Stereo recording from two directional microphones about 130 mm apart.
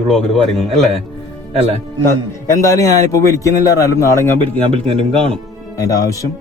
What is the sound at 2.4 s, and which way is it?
A man's voice, 25° left (ahead or behind).